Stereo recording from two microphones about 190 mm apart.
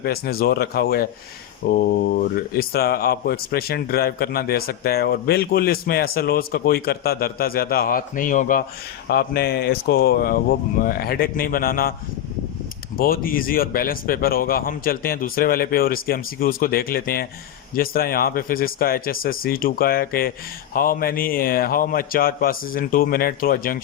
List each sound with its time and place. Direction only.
0.0 s a man's voice: 55° left (ahead or behind)
9.0 s a man's voice: 55° left (ahead or behind)
13.0 s a man's voice: 50° left (ahead or behind)